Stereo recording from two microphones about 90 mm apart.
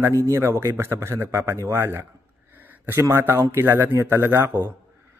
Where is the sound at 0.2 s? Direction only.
35° right (ahead or behind).